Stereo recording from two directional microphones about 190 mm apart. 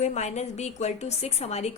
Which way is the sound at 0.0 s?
35° left (ahead or behind).